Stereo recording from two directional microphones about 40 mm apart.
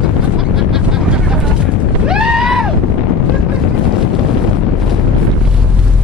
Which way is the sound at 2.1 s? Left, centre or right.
Centre.